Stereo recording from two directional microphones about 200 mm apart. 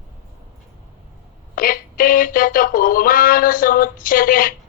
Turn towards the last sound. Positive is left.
turn(degrees=45)  # may be behind; listen again after turning